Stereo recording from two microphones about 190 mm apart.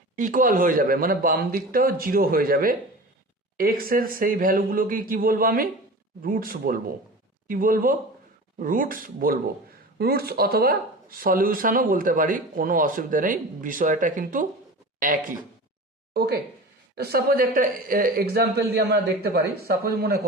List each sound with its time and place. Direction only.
0.2 s speech: 45° right (ahead or behind)
16.1 s speech: 60° right (ahead or behind)